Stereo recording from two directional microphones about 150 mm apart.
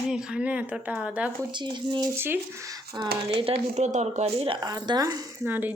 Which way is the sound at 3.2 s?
40° right (ahead or behind).